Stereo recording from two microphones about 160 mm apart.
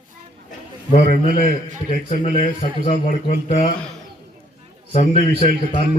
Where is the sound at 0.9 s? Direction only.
45° left (ahead or behind).